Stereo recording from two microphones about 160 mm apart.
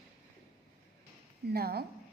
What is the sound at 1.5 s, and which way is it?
Speech, 75° right (ahead or behind).